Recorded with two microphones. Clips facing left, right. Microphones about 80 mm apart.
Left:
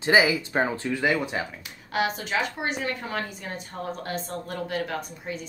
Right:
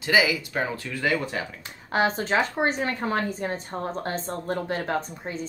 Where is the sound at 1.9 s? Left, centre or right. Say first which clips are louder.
Right 3 dB; right.